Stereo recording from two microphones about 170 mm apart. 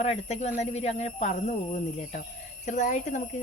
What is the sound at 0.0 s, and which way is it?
Speech, 40° left (ahead or behind).